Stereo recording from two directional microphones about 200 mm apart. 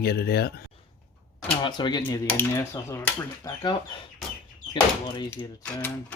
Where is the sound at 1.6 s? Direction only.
25° left (ahead or behind).